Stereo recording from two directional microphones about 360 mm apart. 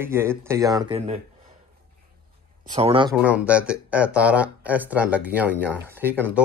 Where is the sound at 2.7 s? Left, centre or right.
Centre.